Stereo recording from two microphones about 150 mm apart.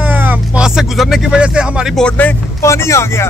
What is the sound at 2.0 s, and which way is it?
Speech, 15° left (ahead or behind).